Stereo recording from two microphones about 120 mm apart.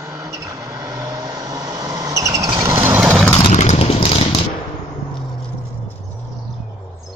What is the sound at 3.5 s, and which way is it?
Vehicle, 65° left (ahead or behind).